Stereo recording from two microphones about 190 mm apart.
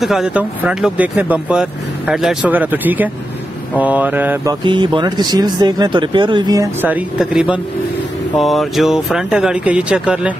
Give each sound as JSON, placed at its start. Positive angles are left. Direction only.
{"t": 0.0, "sound": "speech", "side_deg": 0}
{"t": 4.6, "sound": "speech", "side_deg": -25}